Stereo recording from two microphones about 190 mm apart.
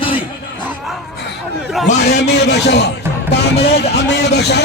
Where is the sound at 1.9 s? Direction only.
60° left (ahead or behind).